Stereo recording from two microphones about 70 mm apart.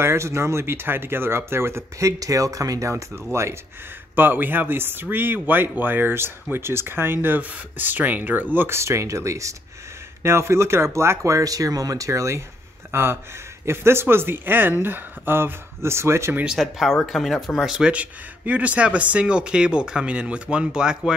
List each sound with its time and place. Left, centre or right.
0.0 s speech: right
4.1 s speech: right
8.5 s speech: right
16.5 s speech: centre
17.6 s speech: centre
17.9 s speech: right